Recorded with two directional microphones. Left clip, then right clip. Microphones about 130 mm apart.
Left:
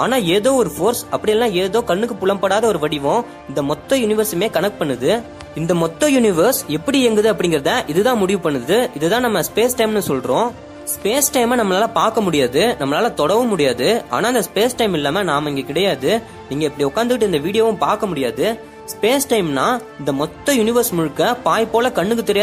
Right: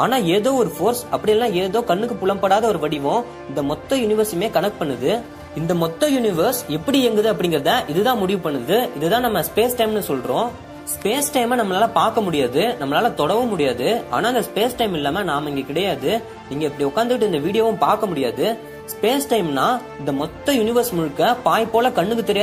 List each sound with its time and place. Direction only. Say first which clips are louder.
0.0 s speech: left 2 dB; 30° left (ahead or behind)